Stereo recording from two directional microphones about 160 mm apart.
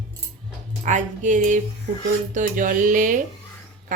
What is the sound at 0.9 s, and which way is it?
A woman's voice, 50° right (ahead or behind).